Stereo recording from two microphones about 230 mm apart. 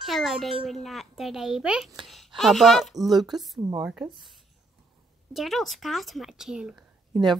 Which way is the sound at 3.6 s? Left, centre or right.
Centre.